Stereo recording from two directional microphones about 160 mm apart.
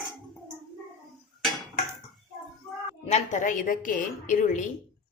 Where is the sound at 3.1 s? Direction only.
50° left (ahead or behind).